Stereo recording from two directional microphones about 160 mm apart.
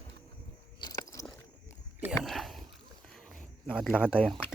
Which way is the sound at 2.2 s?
Centre (ahead or behind).